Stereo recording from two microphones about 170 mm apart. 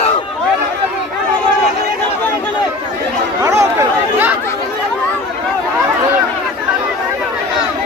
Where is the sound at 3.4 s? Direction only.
15° right (ahead or behind).